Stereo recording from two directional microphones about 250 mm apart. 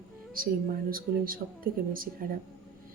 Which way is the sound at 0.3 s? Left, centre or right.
Right.